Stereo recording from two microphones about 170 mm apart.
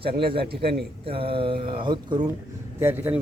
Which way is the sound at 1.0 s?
35° right (ahead or behind).